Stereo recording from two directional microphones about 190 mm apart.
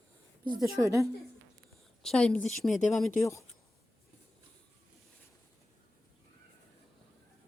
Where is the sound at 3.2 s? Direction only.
15° left (ahead or behind).